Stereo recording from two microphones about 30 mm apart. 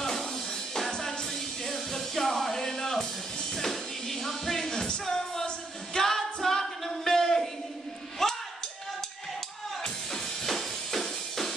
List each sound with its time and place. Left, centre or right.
1.7 s music: centre; by 5.2 s left
5.9 s a sound: centre
9.8 s music: centre